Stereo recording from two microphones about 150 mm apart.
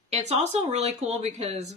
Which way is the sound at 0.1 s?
45° right (ahead or behind).